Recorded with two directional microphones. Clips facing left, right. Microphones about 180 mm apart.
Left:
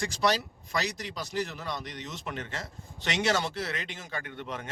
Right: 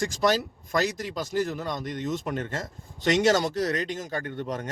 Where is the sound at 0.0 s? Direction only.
45° right (ahead or behind).